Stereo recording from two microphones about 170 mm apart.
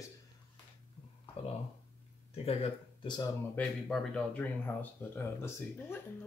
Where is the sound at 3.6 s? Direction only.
5° left (ahead or behind).